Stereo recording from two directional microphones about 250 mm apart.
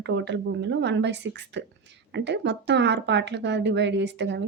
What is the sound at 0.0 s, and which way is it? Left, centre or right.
Speech, right.